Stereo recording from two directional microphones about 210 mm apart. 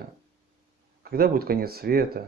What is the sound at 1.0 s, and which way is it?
Speech, 45° right (ahead or behind).